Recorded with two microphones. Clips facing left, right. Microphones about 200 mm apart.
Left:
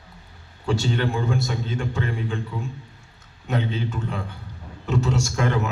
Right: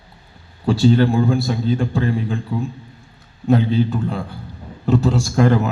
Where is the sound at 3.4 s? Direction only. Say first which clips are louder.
Right 10 dB; 35° right (ahead or behind).